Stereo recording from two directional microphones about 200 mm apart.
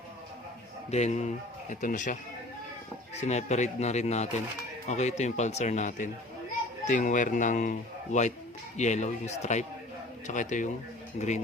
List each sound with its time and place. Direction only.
0.9 s a man's voice: 35° left (ahead or behind)
3.2 s a man's voice: 35° left (ahead or behind)